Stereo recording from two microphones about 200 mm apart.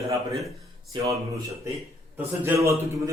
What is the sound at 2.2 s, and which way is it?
Speech, 15° right (ahead or behind).